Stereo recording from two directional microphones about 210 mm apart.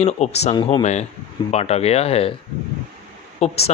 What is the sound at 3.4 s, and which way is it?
Speech, 30° left (ahead or behind).